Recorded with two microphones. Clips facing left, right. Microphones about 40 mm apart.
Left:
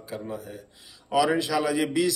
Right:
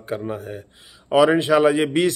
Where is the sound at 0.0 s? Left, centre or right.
Right.